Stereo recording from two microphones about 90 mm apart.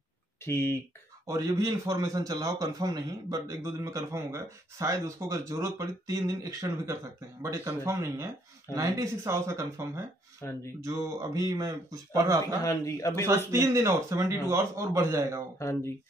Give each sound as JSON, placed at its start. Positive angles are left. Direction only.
{"t": 0.5, "sound": "speech", "side_deg": 30}
{"t": 1.2, "sound": "a man's voice", "side_deg": -35}
{"t": 10.4, "sound": "speech", "side_deg": 30}
{"t": 10.8, "sound": "a man's voice", "side_deg": -40}
{"t": 12.8, "sound": "speech", "side_deg": 35}
{"t": 13.5, "sound": "a man's voice", "side_deg": -35}
{"t": 15.6, "sound": "speech", "side_deg": 30}